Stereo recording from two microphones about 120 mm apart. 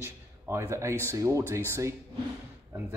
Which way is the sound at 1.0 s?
25° right (ahead or behind).